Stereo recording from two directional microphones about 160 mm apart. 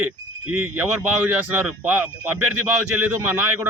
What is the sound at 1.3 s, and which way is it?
Speech, 10° right (ahead or behind).